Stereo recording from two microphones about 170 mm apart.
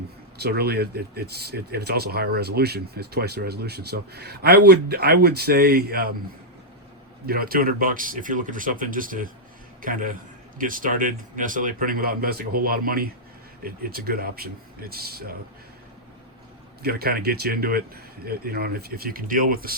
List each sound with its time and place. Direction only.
0.3 s speech: 70° right (ahead or behind)
7.3 s speech: 60° right (ahead or behind)
16.8 s speech: 65° right (ahead or behind)